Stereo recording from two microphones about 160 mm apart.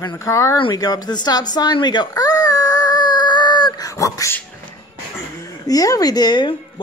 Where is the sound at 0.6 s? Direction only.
25° left (ahead or behind).